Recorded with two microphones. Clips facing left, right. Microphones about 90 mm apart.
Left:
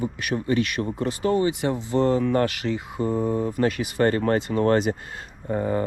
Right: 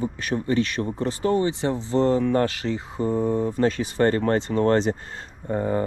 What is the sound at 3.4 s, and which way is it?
Speech, 30° right (ahead or behind).